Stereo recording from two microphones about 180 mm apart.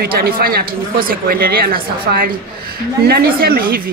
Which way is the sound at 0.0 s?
55° right (ahead or behind).